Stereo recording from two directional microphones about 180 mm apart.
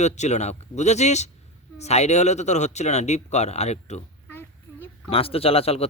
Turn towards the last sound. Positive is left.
turn(degrees=35)  # may be behind; listen again after turning